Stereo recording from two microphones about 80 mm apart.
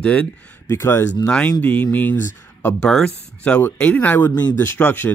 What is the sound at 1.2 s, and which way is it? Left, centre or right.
Speech, centre.